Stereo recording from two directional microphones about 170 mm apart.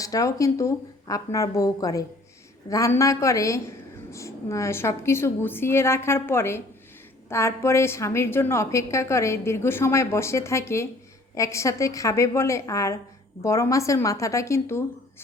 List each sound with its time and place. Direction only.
0.0 s a woman's voice: 20° left (ahead or behind)